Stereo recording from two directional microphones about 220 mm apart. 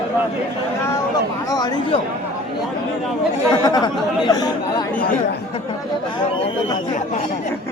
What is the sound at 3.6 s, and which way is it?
Speech, 15° left (ahead or behind).